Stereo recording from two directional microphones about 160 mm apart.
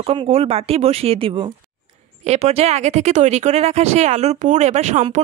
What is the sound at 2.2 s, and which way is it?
Speech, 45° right (ahead or behind).